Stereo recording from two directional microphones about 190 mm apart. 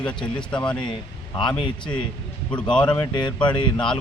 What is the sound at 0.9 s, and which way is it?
A man's voice, 25° left (ahead or behind).